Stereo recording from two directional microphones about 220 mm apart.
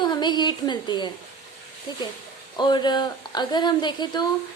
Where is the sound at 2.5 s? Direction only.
20° left (ahead or behind).